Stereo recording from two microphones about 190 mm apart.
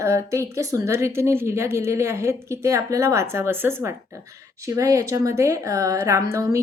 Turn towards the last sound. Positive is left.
turn(degrees=-15)  # may be behind; listen again after turning